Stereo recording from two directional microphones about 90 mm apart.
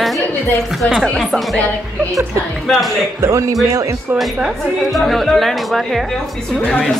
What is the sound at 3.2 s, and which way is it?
Speech, 35° right (ahead or behind).